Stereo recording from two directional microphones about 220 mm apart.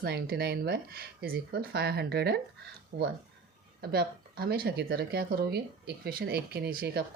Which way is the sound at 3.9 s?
45° right (ahead or behind).